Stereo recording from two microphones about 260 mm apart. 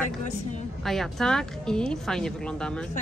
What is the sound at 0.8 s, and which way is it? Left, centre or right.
Speech, centre.